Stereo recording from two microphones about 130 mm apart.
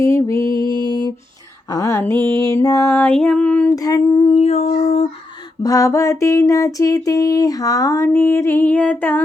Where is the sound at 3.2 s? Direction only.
5° left (ahead or behind).